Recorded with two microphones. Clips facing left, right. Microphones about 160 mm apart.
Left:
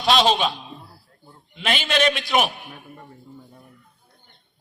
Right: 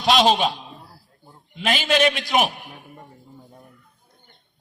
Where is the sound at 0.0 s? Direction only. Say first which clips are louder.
Right 1 dB; 45° right (ahead or behind).